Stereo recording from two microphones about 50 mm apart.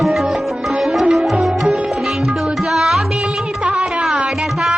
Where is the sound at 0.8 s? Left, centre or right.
Centre.